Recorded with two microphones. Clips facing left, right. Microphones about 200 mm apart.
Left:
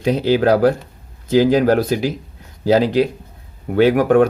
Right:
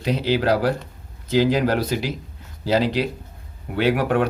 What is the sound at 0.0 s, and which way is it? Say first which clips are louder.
Speech: left 6 dB; 50° left (ahead or behind).